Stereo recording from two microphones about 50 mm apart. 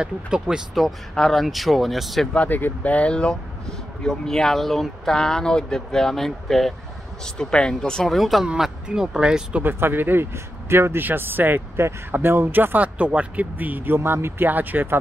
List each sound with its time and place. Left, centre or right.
0.0 s speech: centre
0.8 s speech: centre
2.3 s speech: left
4.0 s speech: centre
7.3 s speech: centre
8.1 s speech: centre
8.8 s speech: centre
9.6 s speech: right
10.7 s a man's voice: right
11.0 s speech: right
12.8 s speech: right
13.9 s speech: right
14.5 s speech: right